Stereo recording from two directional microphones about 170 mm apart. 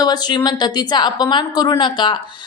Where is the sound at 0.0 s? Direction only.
25° left (ahead or behind).